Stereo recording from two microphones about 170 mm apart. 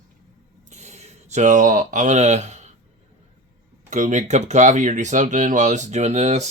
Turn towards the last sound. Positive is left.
turn(degrees=-40)  # may be behind; listen again after turning